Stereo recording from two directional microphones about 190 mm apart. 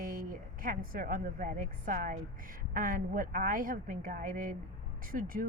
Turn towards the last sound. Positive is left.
turn(degrees=-50)  # may be behind; listen again after turning